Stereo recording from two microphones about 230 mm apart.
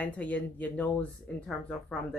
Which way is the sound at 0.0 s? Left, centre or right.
Centre.